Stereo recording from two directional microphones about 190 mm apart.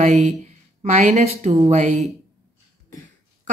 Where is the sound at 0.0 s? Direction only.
40° right (ahead or behind).